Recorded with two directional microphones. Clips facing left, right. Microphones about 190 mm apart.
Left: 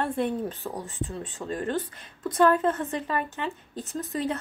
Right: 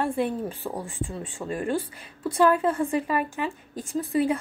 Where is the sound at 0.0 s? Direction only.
10° right (ahead or behind).